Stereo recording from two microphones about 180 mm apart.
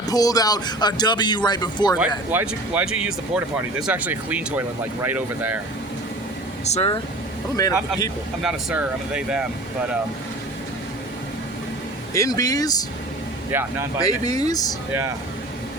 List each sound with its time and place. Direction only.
0.1 s speech: 20° left (ahead or behind)
2.0 s speech: 10° right (ahead or behind)
6.7 s speech: 35° left (ahead or behind)
8.4 s speech: 5° right (ahead or behind)
12.1 s speech: 20° left (ahead or behind)
14.0 s speech: 20° left (ahead or behind)